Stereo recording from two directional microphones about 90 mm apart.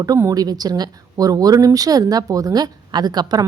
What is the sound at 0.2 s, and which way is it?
Speech, 40° right (ahead or behind).